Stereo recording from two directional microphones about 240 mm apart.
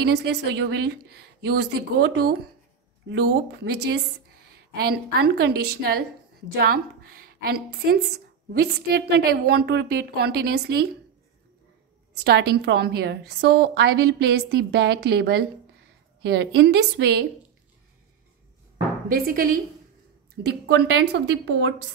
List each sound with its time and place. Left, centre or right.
0.0 s a woman's voice: right
12.2 s a woman's voice: right
19.0 s a woman's voice: right